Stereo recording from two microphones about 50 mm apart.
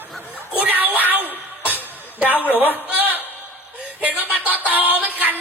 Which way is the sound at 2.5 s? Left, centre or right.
Right.